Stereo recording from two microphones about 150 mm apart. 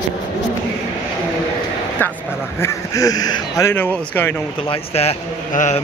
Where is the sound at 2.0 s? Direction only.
10° left (ahead or behind).